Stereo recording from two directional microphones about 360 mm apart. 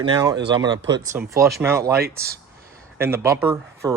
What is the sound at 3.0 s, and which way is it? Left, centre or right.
Speech, centre.